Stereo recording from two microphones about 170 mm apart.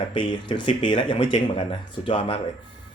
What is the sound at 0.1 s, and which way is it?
Speech, 30° left (ahead or behind).